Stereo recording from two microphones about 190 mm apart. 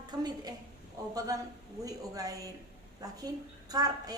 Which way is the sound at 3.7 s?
20° right (ahead or behind).